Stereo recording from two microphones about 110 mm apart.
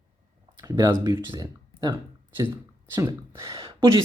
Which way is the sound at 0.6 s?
30° right (ahead or behind).